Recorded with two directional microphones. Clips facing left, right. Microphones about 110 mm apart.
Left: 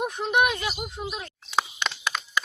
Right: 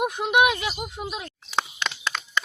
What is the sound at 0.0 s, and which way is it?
Speech, 10° right (ahead or behind).